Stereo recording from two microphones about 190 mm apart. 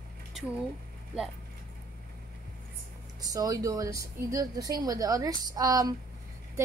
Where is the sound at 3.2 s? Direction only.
20° right (ahead or behind).